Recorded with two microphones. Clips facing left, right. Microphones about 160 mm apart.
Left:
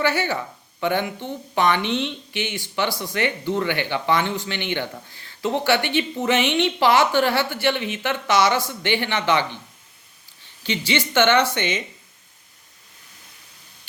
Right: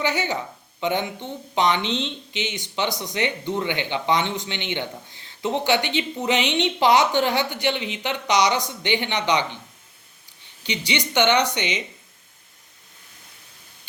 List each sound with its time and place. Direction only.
0.0 s a woman's voice: 15° right (ahead or behind)